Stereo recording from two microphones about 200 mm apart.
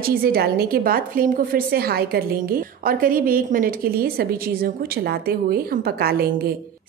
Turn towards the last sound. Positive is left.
turn(degrees=-50)  # may be behind; listen again after turning